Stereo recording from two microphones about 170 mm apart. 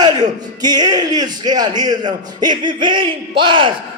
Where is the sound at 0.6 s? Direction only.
25° right (ahead or behind).